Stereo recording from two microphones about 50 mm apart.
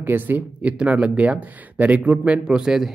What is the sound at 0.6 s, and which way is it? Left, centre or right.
Speech, right.